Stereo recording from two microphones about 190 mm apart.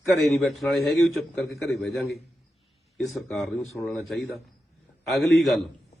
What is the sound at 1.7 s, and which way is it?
A man's voice, centre (ahead or behind).